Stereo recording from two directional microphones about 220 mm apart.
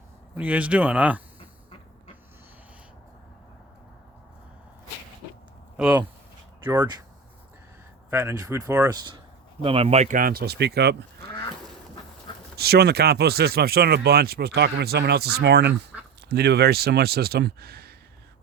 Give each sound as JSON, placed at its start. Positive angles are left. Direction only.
{"t": 0.3, "sound": "speech", "side_deg": -5}
{"t": 5.7, "sound": "speech", "side_deg": -5}
{"t": 6.7, "sound": "speech", "side_deg": -20}
{"t": 8.1, "sound": "speech", "side_deg": -10}
{"t": 12.5, "sound": "speech", "side_deg": -45}